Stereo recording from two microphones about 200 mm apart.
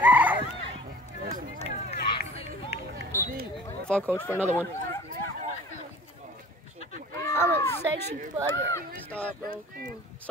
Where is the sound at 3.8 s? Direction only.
5° left (ahead or behind).